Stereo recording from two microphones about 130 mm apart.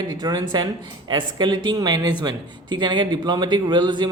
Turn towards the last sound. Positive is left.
turn(degrees=-35)  # may be behind; listen again after turning